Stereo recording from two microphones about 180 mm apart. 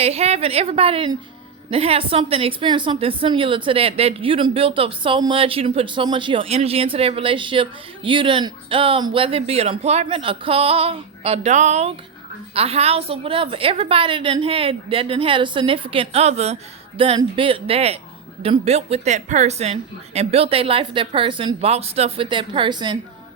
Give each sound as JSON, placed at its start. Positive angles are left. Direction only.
{"t": 0.0, "sound": "a woman's voice", "side_deg": -35}